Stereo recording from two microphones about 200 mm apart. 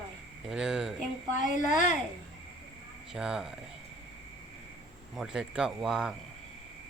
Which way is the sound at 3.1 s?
5° right (ahead or behind).